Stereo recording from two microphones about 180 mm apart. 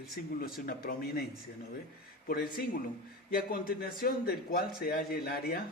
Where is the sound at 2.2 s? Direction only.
55° left (ahead or behind).